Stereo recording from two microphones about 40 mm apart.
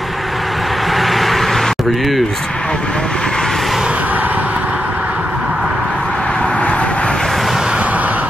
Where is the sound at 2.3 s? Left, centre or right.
Centre.